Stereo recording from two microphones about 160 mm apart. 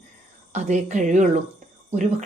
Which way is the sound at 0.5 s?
45° right (ahead or behind).